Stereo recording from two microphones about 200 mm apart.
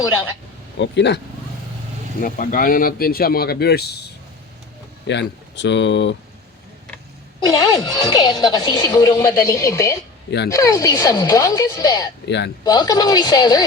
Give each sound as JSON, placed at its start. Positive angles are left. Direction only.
{"t": 0.8, "sound": "speech", "side_deg": 60}
{"t": 2.2, "sound": "speech", "side_deg": 45}
{"t": 7.3, "sound": "a woman's voice", "side_deg": 20}